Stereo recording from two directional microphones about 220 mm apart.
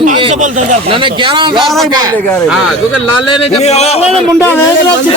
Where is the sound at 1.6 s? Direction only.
Centre (ahead or behind).